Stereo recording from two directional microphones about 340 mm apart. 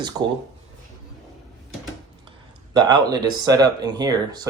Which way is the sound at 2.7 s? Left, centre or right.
Centre.